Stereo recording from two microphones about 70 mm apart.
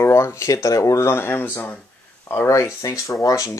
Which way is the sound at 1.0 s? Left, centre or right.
Left.